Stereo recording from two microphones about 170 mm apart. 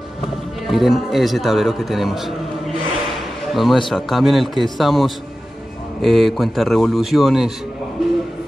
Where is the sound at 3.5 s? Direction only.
Centre (ahead or behind).